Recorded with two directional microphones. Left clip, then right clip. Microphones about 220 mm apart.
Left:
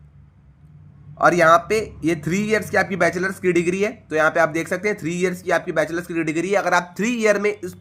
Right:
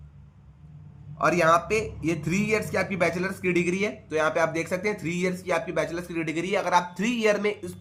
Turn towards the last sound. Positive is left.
turn(degrees=30)  # may be behind; listen again after turning